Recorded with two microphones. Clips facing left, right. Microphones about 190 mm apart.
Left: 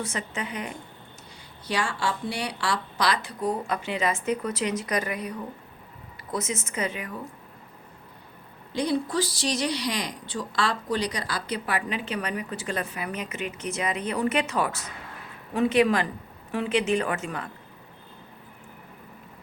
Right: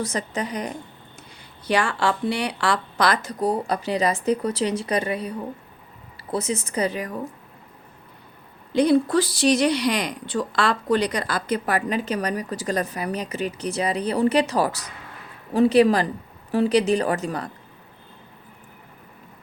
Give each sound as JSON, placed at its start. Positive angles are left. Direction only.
{"t": 0.0, "sound": "speech", "side_deg": -40}
{"t": 1.6, "sound": "speech", "side_deg": -60}
{"t": 8.8, "sound": "speech", "side_deg": -60}